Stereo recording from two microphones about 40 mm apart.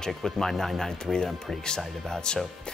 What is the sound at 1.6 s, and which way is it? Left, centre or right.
Speech, left.